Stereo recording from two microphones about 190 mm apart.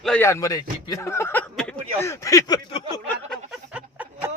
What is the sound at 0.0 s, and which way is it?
Speech, 5° left (ahead or behind).